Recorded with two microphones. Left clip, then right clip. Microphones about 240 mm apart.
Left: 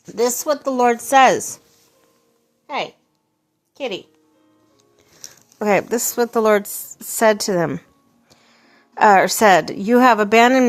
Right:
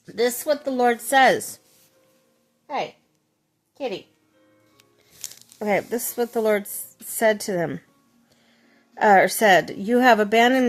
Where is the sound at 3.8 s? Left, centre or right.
Centre.